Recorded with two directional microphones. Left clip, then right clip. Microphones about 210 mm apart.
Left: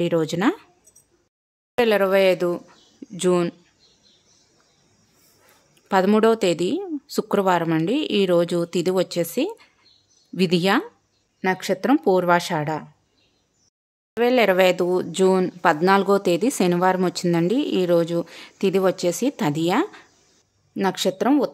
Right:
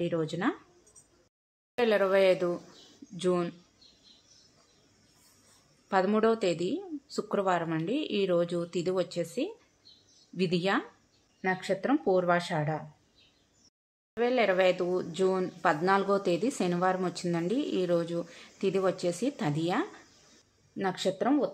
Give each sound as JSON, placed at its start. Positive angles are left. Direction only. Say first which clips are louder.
{"t": 0.0, "sound": "speech", "louder": "left 10 dB", "side_deg": 45}
{"t": 1.8, "sound": "speech", "louder": "left 7 dB", "side_deg": 40}
{"t": 5.9, "sound": "speech", "louder": "left 8 dB", "side_deg": 45}
{"t": 14.1, "sound": "speech", "louder": "left 9 dB", "side_deg": 45}